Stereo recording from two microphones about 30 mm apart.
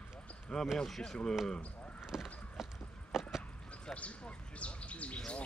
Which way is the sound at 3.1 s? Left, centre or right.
Centre.